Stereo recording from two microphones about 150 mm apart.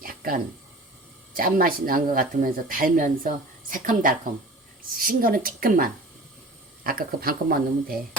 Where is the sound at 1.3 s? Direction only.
75° right (ahead or behind).